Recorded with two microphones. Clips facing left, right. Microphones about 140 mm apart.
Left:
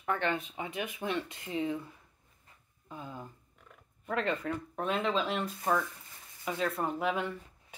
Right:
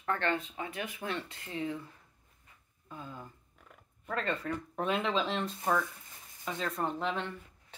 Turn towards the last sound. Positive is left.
turn(degrees=10)  # may be behind; listen again after turning